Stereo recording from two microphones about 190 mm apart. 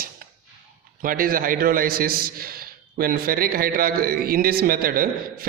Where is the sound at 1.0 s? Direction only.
50° right (ahead or behind).